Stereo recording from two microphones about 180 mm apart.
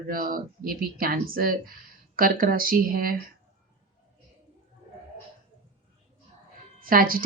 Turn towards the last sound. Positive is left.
turn(degrees=-50)  # may be behind; listen again after turning